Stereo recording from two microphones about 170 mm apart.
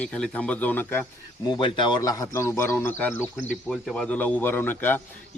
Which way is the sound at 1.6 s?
25° left (ahead or behind).